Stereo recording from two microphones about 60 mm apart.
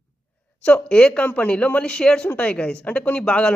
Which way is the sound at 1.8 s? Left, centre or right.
Centre.